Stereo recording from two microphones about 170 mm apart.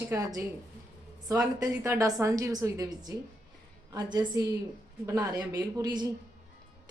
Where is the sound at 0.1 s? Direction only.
20° right (ahead or behind).